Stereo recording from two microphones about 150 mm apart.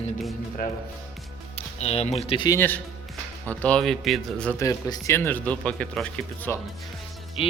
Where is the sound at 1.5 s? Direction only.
45° left (ahead or behind).